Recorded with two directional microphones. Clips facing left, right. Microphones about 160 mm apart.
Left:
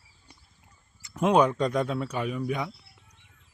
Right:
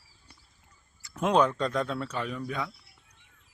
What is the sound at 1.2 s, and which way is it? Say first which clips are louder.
Speech: left 3 dB; 10° left (ahead or behind).